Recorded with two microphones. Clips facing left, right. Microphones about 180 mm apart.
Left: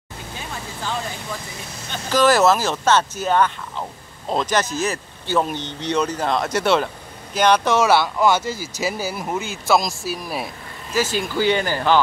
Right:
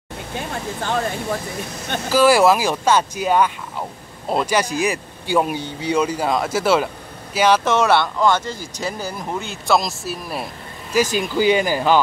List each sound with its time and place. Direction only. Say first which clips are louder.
0.4 s speech: right 6 dB; 55° right (ahead or behind)
2.0 s speech: right 2 dB; 10° right (ahead or behind)
10.9 s speech: right 3 dB; 15° right (ahead or behind)